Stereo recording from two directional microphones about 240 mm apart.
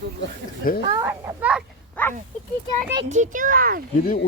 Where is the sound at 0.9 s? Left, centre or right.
Centre.